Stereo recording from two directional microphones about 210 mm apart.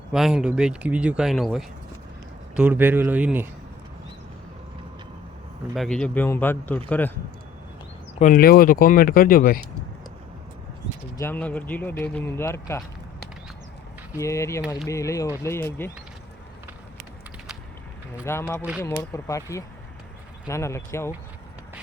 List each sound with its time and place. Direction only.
0.1 s speech: centre (ahead or behind)
5.7 s speech: centre (ahead or behind)
8.2 s speech: 45° left (ahead or behind)
11.2 s speech: 10° left (ahead or behind)
14.2 s speech: 15° left (ahead or behind)
18.3 s speech: 10° left (ahead or behind)